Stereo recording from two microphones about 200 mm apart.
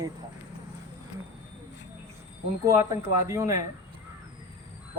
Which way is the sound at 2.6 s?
15° right (ahead or behind).